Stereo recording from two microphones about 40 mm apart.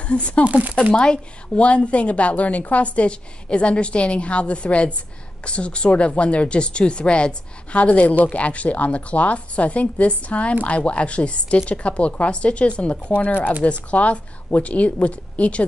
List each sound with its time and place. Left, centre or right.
0.0 s speech: left
0.5 s speech: right
0.9 s a woman's voice: left
13.3 s speech: left
13.7 s a woman's voice: left